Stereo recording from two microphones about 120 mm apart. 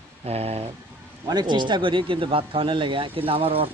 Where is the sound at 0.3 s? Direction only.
55° right (ahead or behind).